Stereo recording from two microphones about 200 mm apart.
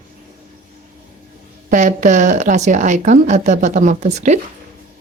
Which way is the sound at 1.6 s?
40° right (ahead or behind).